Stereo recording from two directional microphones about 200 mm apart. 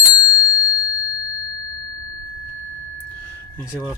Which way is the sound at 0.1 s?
20° left (ahead or behind).